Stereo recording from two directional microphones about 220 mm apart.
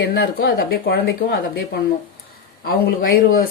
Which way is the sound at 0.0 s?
50° left (ahead or behind).